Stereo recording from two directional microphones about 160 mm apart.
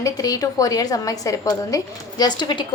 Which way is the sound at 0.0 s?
20° left (ahead or behind).